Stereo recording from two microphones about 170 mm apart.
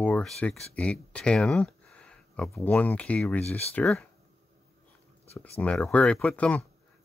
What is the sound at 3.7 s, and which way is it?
Speech, 5° left (ahead or behind).